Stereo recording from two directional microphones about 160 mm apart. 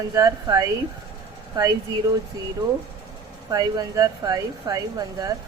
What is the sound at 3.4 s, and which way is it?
Speech, 25° right (ahead or behind).